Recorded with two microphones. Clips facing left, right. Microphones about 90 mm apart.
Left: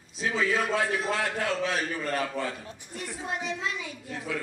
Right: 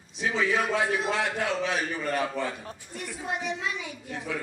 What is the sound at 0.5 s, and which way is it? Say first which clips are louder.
A man's voice: right 1 dB; 15° right (ahead or behind).